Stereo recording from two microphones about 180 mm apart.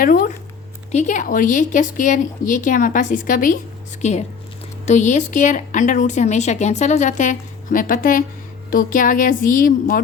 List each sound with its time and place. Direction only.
0.0 s a woman's voice: 50° left (ahead or behind)
4.0 s a woman's voice: 40° left (ahead or behind)